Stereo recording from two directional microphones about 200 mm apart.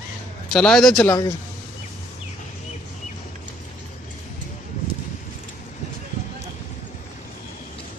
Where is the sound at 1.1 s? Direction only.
15° left (ahead or behind).